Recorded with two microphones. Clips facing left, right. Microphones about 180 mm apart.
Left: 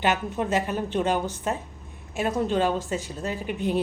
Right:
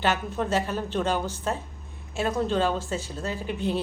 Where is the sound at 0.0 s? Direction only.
15° left (ahead or behind).